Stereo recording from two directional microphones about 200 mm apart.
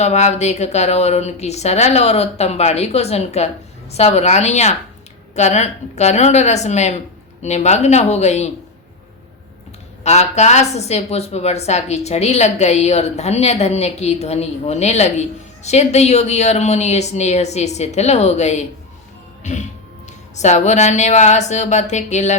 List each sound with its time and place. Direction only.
0.0 s speech: 35° left (ahead or behind)
10.0 s speech: 35° left (ahead or behind)
19.4 s music: 35° left (ahead or behind)
20.3 s speech: 35° left (ahead or behind)